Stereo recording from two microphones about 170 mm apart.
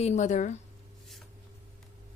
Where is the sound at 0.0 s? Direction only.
40° left (ahead or behind).